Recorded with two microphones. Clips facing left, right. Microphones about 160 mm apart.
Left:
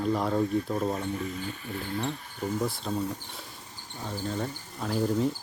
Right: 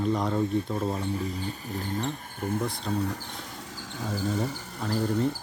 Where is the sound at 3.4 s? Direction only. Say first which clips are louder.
Right 6 dB; 90° right.